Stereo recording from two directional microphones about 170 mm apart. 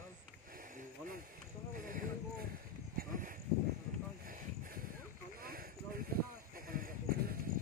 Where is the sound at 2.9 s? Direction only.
55° right (ahead or behind).